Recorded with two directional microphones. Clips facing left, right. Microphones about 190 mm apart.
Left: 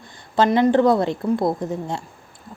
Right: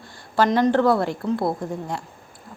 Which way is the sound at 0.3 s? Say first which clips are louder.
Left 2 dB; 20° left (ahead or behind).